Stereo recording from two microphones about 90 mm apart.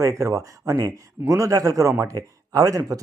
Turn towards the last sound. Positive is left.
turn(degrees=-40)  # may be behind; listen again after turning